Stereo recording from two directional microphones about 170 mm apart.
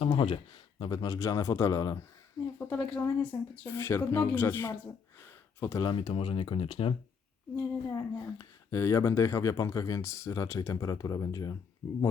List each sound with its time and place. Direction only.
0.0 s a man's voice: 30° left (ahead or behind); by 4.8 s 15° left (ahead or behind)
5.2 s a sound: 15° left (ahead or behind)
5.8 s speech: 30° left (ahead or behind)
7.5 s speech: 15° left (ahead or behind)